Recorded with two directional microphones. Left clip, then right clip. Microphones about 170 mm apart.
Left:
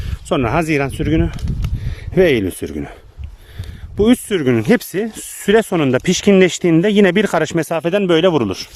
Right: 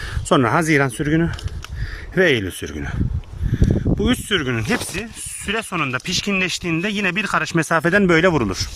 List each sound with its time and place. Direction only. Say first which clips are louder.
0.3 s speech: even; 10° left (ahead or behind)
2.1 s speech: left 3 dB; 25° left (ahead or behind)
3.5 s a sound: right 15 dB; 30° left (ahead or behind)
4.0 s speech: left 7 dB; 30° left (ahead or behind)
7.7 s speech: right 1 dB; 15° left (ahead or behind)